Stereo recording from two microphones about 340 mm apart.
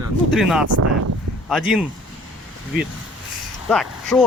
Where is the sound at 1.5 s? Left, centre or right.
Centre.